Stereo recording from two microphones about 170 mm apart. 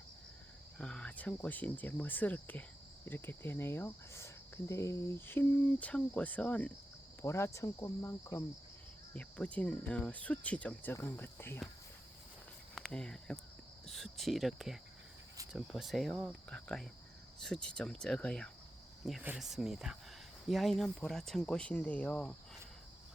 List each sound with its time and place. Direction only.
0.8 s speech: 5° left (ahead or behind)
12.7 s speech: centre (ahead or behind)
19.2 s speech: 5° right (ahead or behind)